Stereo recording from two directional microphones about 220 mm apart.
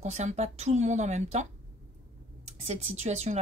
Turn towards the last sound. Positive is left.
turn(degrees=-30)  # may be behind; listen again after turning